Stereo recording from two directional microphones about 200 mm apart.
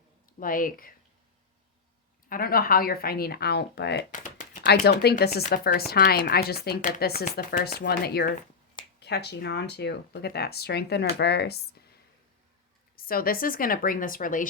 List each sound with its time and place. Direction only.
0.3 s speech: 45° left (ahead or behind)
2.3 s speech: 45° left (ahead or behind)
4.1 s a sound: 40° left (ahead or behind)
4.9 s speech: 55° left (ahead or behind)
13.0 s speech: 45° left (ahead or behind)